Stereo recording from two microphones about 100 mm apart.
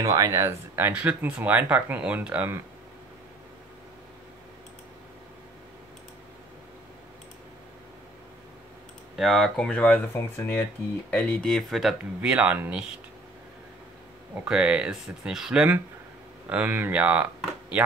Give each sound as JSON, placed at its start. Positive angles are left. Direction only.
{"t": 0.0, "sound": "speech", "side_deg": -35}
{"t": 0.9, "sound": "speech", "side_deg": -15}
{"t": 9.1, "sound": "speech", "side_deg": 0}
{"t": 10.1, "sound": "speech", "side_deg": 20}
{"t": 12.2, "sound": "speech", "side_deg": -10}
{"t": 14.4, "sound": "speech", "side_deg": -10}